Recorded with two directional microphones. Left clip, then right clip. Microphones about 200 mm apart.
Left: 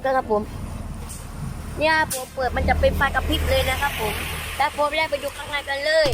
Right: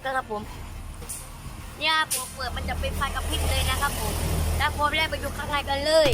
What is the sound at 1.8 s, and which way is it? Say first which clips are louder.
Speech: left 4 dB; 35° left (ahead or behind).